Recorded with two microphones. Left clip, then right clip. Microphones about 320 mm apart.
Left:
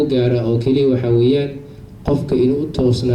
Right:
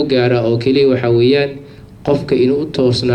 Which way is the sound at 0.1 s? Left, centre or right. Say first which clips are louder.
Right 4 dB; right.